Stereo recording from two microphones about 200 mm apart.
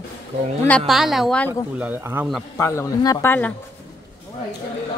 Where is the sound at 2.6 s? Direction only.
15° left (ahead or behind).